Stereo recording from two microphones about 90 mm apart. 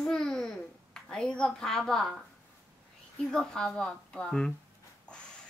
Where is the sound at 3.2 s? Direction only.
5° left (ahead or behind).